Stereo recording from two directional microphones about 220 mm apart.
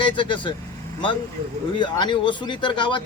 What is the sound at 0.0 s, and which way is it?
Speech, 20° left (ahead or behind).